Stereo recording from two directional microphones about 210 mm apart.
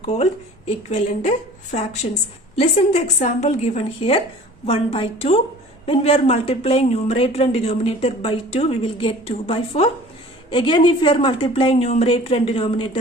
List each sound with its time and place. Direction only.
0.0 s a woman's voice: 30° left (ahead or behind)